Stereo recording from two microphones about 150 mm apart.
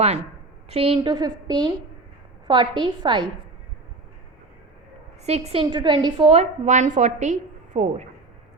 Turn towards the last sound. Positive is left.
turn(degrees=-50)  # may be behind; listen again after turning